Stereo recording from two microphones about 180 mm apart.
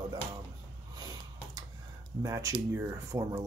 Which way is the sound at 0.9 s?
20° right (ahead or behind).